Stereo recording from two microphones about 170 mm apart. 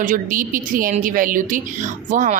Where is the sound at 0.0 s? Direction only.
50° right (ahead or behind).